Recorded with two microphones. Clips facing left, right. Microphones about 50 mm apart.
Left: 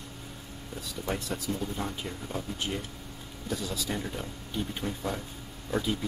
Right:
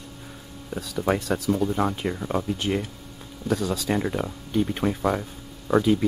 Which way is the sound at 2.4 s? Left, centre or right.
Right.